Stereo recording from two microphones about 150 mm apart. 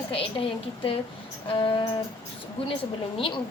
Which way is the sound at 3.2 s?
35° left (ahead or behind).